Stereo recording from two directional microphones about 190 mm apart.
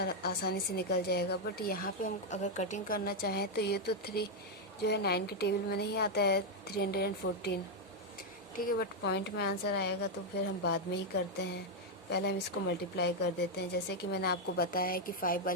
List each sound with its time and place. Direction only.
0.0 s a woman's voice: 55° left (ahead or behind)